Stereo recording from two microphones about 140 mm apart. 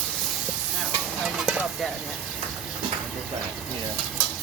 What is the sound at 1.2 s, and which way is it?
Stir, centre (ahead or behind).